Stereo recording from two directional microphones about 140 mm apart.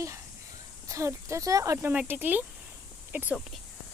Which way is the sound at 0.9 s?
20° right (ahead or behind).